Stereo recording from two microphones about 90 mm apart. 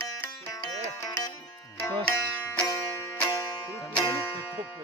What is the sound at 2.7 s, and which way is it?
Music, 40° left (ahead or behind).